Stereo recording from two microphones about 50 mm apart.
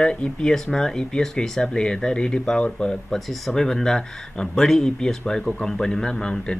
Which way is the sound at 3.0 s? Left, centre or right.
Centre.